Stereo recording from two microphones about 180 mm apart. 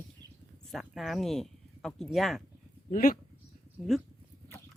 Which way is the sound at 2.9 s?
50° left (ahead or behind).